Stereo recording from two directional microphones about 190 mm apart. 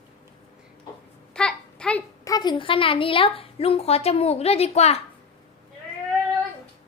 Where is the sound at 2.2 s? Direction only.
20° left (ahead or behind).